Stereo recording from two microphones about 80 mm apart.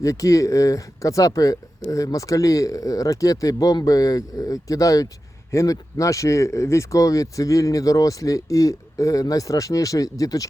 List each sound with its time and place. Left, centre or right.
0.0 s speech: left